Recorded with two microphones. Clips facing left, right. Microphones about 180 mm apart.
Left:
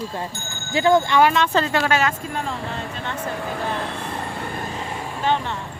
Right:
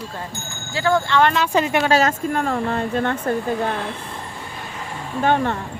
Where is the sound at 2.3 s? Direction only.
55° right (ahead or behind).